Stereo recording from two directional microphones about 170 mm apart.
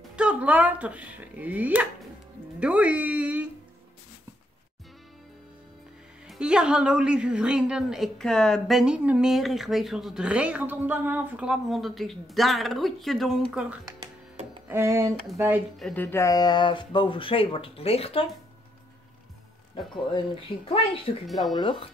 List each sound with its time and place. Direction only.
0.1 s speech: 5° right (ahead or behind)
6.2 s a woman's voice: 5° right (ahead or behind)
15.8 s speech: 10° left (ahead or behind); by 18.2 s 35° left (ahead or behind)
20.6 s speech: 35° left (ahead or behind)
21.3 s a woman's voice: centre (ahead or behind)
21.5 s speech: 30° left (ahead or behind)